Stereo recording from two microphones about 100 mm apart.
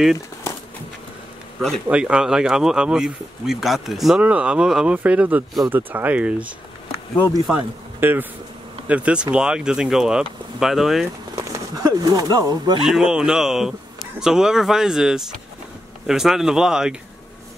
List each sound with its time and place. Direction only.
1.9 s speech: 10° right (ahead or behind)
4.2 s speech: 10° right (ahead or behind)
7.5 s speech: 10° right (ahead or behind)
8.0 s speech: 20° right (ahead or behind); by 11.1 s centre (ahead or behind)
11.3 s speech: 35° right (ahead or behind)
12.8 s speech: 5° right (ahead or behind)